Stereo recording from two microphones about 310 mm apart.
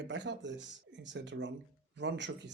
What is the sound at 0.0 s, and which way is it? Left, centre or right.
Speech, right.